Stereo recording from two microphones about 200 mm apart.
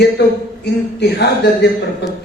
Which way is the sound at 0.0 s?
55° left (ahead or behind).